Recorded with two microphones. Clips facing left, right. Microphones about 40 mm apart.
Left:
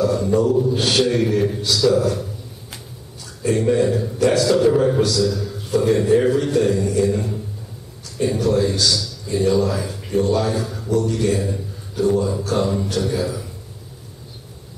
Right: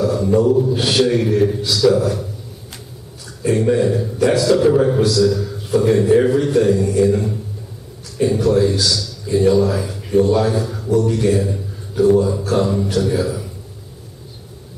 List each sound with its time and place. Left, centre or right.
0.0 s a man's voice: centre
3.4 s a man's voice: centre